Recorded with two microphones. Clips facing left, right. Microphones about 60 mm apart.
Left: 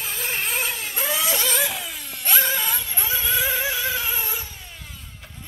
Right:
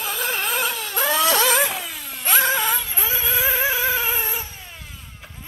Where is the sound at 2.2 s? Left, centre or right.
Right.